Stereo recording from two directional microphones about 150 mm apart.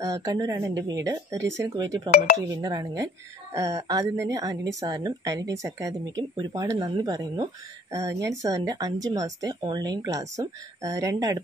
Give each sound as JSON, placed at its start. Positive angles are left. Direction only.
{"t": 0.0, "sound": "a woman's voice", "side_deg": -25}